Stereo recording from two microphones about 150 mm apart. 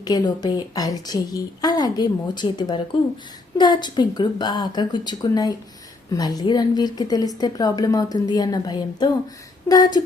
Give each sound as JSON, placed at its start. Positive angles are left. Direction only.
{"t": 0.0, "sound": "a woman's voice", "side_deg": 25}